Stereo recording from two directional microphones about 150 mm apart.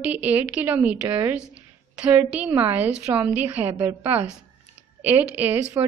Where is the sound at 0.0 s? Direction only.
10° right (ahead or behind).